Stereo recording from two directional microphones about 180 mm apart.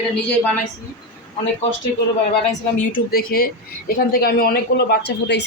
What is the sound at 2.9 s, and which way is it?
A man's voice, 55° left (ahead or behind).